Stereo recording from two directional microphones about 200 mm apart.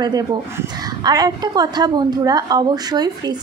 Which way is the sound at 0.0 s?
20° right (ahead or behind).